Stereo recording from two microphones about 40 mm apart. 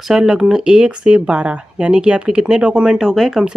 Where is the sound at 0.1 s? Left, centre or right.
Centre.